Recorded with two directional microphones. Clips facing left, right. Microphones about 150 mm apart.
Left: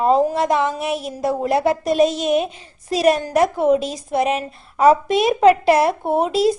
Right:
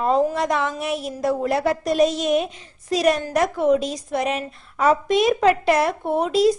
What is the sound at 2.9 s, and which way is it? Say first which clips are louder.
A woman's voice: left 3 dB; 30° left (ahead or behind).